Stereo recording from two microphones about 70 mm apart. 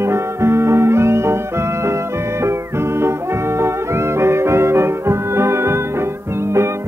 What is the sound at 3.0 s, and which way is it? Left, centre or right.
Music, right.